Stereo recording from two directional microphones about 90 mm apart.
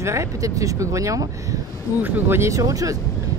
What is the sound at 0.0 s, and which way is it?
Speech, 35° right (ahead or behind).